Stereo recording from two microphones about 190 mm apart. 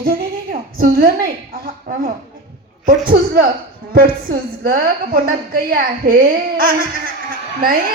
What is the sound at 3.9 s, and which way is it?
A woman's voice, 50° right (ahead or behind).